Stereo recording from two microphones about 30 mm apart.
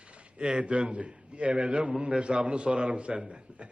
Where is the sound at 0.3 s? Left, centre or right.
Right.